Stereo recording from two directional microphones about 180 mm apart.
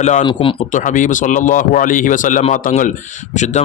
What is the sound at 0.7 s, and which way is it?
A man's voice, 45° left (ahead or behind).